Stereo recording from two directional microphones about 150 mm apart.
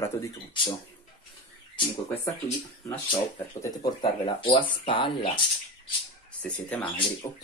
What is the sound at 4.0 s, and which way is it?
Speech, 35° left (ahead or behind).